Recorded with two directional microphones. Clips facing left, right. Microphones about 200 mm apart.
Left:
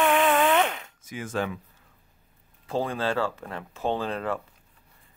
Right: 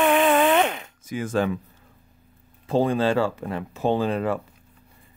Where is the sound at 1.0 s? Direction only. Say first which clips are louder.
Right 6 dB; 35° right (ahead or behind).